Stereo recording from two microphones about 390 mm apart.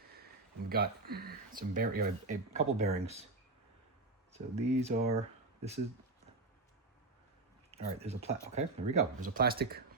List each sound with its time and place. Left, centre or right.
0.7 s speech: right
4.3 s speech: centre
7.7 s speech: centre